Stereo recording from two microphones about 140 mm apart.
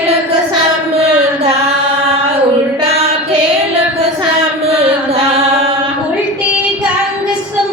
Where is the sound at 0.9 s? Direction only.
45° right (ahead or behind).